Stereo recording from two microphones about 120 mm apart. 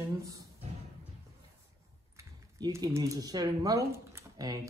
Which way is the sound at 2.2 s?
30° right (ahead or behind).